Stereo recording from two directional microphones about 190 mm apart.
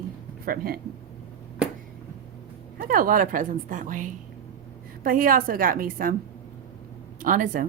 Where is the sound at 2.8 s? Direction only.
45° right (ahead or behind).